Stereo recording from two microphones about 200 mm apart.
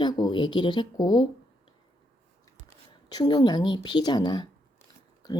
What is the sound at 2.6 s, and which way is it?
A woman's voice, 20° left (ahead or behind).